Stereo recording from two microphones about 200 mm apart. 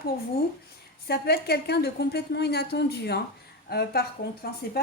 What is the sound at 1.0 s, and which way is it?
A woman's voice, 50° left (ahead or behind).